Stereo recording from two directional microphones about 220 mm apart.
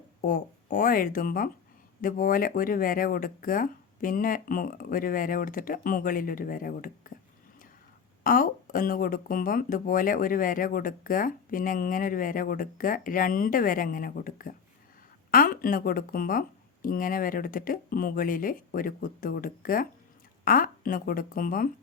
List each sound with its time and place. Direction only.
0.3 s speech: 40° left (ahead or behind)
8.2 s speech: 40° left (ahead or behind)